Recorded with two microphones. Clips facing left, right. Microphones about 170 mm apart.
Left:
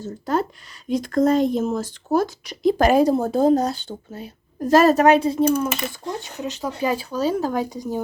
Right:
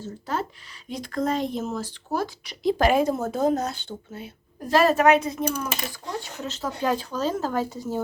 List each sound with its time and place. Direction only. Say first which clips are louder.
0.0 s speech: left 6 dB; 45° left (ahead or behind); by 8.0 s 15° left (ahead or behind)